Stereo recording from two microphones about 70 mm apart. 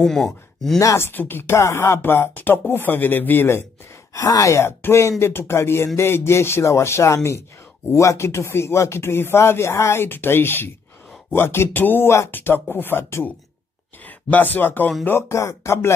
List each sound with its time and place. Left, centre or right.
0.0 s speech: centre
0.9 s speech: left
2.0 s speech: left
4.1 s speech: left
15.0 s speech: left